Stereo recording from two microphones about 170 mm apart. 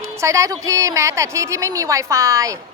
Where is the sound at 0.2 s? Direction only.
20° right (ahead or behind).